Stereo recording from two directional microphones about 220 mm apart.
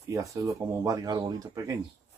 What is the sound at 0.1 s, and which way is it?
Speech, 15° right (ahead or behind).